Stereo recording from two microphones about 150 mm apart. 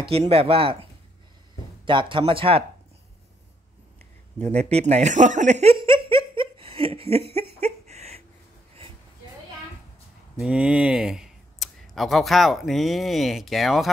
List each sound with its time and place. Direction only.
0.3 s speech: 40° right (ahead or behind)
1.9 s speech: 35° right (ahead or behind)
4.4 s speech: 45° right (ahead or behind)
10.4 s speech: 5° right (ahead or behind)